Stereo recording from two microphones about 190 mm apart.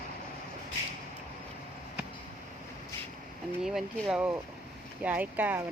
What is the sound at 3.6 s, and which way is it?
Speech, centre (ahead or behind).